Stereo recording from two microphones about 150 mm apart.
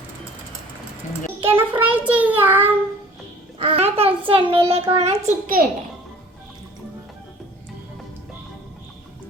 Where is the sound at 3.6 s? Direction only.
40° right (ahead or behind).